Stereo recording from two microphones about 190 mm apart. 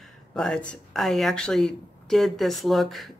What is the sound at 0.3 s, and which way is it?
Speech, 5° left (ahead or behind).